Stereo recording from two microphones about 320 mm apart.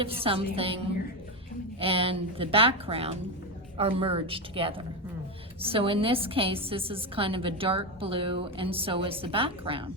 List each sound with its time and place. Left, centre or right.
0.0 s a woman's voice: centre
1.8 s a woman's voice: centre